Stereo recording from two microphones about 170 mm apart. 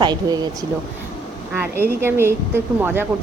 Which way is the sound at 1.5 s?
15° right (ahead or behind).